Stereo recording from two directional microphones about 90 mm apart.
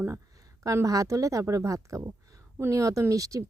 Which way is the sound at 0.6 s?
35° right (ahead or behind).